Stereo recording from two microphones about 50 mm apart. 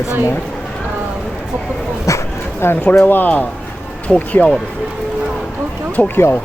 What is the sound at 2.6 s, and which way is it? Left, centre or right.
Speech, left.